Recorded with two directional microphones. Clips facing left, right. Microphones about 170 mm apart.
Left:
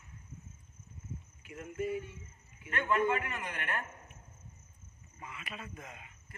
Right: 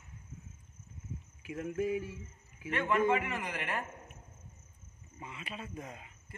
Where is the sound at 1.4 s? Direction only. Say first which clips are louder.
Right 4 dB; 90° right.